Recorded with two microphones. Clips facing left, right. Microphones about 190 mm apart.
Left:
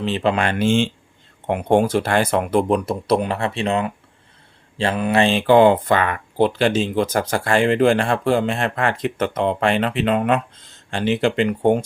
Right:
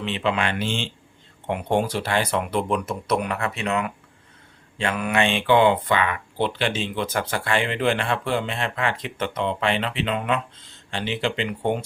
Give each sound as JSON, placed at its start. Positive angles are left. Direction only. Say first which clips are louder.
{"t": 0.0, "sound": "speech", "louder": "left 5 dB", "side_deg": 40}